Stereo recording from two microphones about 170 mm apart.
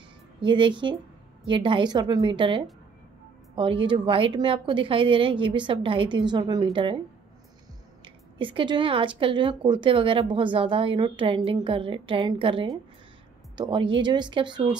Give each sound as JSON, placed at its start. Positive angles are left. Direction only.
{"t": 0.4, "sound": "a woman's voice", "side_deg": -30}
{"t": 8.0, "sound": "a woman's voice", "side_deg": -30}